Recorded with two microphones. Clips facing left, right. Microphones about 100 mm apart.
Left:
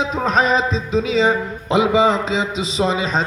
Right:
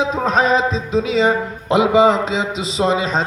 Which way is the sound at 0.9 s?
10° right (ahead or behind).